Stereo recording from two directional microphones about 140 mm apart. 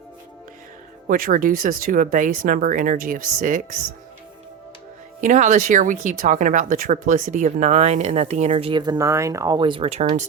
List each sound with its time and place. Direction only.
1.0 s speech: 85° right; by 3.8 s 70° right (ahead or behind)
5.2 s speech: 65° right (ahead or behind)
8.7 s speech: 30° right (ahead or behind); by 10.2 s 50° right (ahead or behind)